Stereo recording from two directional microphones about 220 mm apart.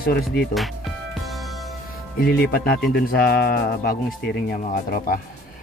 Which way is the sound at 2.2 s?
45° left (ahead or behind).